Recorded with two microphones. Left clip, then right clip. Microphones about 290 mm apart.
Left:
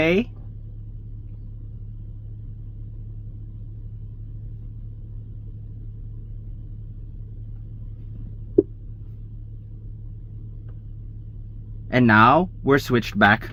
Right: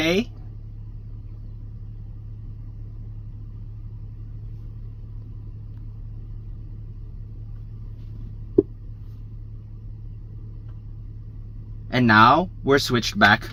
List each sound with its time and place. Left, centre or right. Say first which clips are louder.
0.0 s speech: left 2 dB; centre
11.9 s speech: even; centre